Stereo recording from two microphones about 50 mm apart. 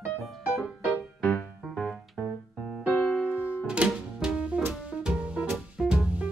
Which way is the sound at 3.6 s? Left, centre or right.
Centre.